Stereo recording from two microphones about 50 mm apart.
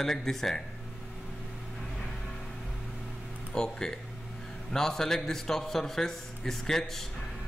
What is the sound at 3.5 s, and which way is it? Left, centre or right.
A man's voice, centre.